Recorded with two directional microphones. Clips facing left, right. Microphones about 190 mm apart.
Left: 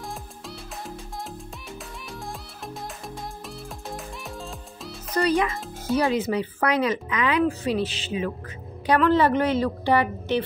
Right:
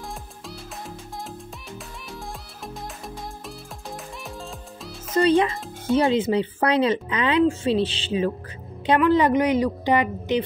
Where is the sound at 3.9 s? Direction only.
Centre (ahead or behind).